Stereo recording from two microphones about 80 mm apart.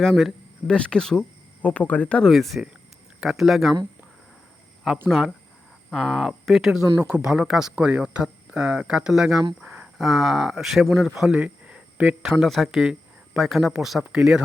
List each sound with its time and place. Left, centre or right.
0.0 s speech: centre
0.7 s speech: centre
2.2 s speech: centre
5.0 s speech: centre
9.6 s a sound: centre
10.0 s speech: centre
12.4 s speech: centre